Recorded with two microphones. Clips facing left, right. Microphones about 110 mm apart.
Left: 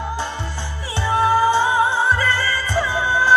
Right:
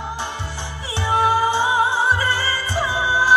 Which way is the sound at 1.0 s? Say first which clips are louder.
Left 2 dB; 15° right (ahead or behind).